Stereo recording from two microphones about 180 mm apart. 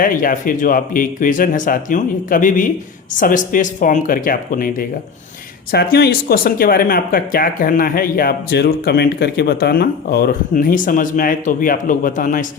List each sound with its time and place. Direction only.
0.0 s speech: 50° left (ahead or behind)
5.7 s speech: 60° left (ahead or behind)